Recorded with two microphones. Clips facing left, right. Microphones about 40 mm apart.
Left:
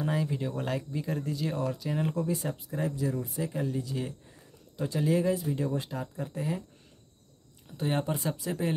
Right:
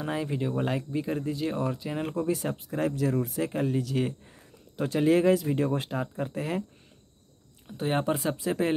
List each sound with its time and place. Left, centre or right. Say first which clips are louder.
0.0 s speech: right 1 dB; right
3.0 s speech: right 4 dB; right
7.6 s speech: right 2 dB; right
8.0 s speech: right 4 dB; right